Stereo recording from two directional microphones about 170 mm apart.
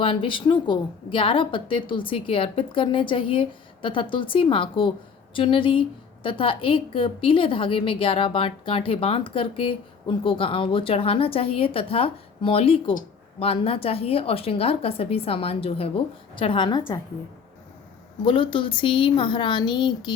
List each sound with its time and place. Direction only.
0.0 s a woman's voice: 30° left (ahead or behind)
18.3 s speech: 30° left (ahead or behind)